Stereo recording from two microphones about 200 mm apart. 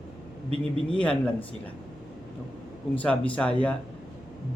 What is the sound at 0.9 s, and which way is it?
Speech, 5° left (ahead or behind).